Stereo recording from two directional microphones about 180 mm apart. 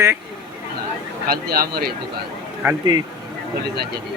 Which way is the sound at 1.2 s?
55° right (ahead or behind).